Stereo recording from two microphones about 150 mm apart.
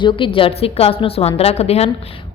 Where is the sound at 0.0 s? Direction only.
35° left (ahead or behind).